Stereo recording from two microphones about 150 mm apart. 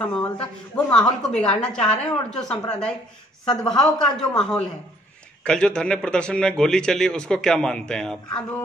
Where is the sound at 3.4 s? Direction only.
30° left (ahead or behind).